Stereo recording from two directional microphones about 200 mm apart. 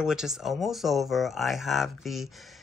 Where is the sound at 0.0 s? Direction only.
5° right (ahead or behind).